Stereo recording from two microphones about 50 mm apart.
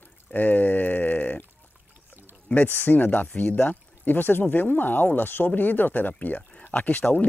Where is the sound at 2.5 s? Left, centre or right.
Left.